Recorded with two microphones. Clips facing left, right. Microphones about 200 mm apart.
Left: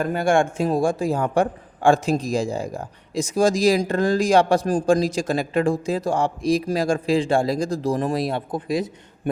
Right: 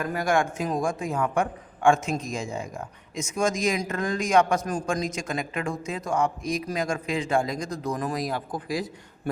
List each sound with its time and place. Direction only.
0.0 s a man's voice: 30° left (ahead or behind)